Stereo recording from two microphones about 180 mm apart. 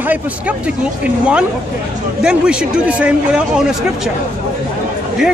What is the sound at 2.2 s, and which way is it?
A man's voice, 5° right (ahead or behind).